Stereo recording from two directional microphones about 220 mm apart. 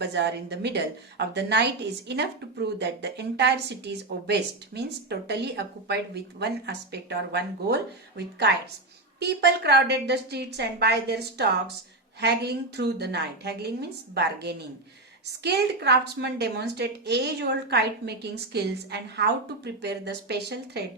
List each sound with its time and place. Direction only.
0.0 s a woman's voice: 50° right (ahead or behind)